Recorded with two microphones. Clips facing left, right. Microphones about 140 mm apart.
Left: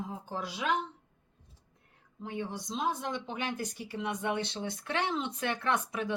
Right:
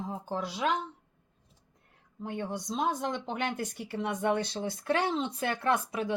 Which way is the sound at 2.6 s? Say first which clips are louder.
Right 3 dB; 50° right (ahead or behind).